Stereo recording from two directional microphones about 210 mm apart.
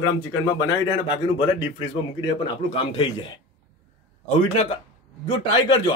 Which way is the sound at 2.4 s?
25° left (ahead or behind).